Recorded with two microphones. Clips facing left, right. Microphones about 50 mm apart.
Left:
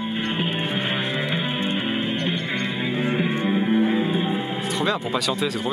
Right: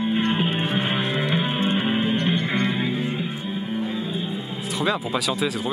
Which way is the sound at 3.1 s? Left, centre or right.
Left.